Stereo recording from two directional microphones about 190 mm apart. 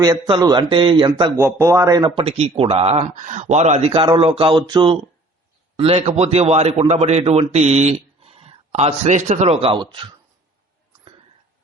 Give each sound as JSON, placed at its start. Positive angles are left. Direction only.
{"t": 0.0, "sound": "speech", "side_deg": -20}
{"t": 1.4, "sound": "a man's voice", "side_deg": -15}